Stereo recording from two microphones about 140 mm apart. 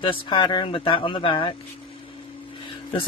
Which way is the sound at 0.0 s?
35° left (ahead or behind).